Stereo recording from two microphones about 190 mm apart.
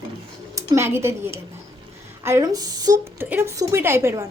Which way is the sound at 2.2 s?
15° right (ahead or behind).